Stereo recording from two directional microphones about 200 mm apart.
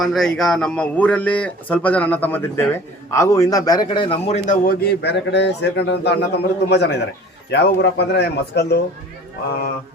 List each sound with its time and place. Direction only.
0.0 s a man's voice: centre (ahead or behind); by 4.4 s 25° left (ahead or behind)
4.4 s a man's voice: 50° left (ahead or behind)